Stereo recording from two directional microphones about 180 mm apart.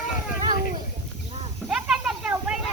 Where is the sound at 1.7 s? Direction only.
5° right (ahead or behind).